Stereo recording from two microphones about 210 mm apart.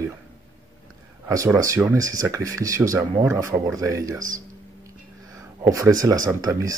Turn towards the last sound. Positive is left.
turn(degrees=-15)  # may be behind; listen again after turning